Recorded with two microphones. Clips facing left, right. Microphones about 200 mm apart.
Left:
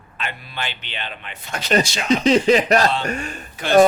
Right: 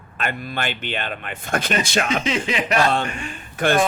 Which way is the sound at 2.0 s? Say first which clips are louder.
Left 8 dB; 35° left (ahead or behind).